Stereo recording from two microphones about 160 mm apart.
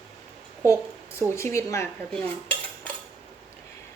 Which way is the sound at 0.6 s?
20° left (ahead or behind).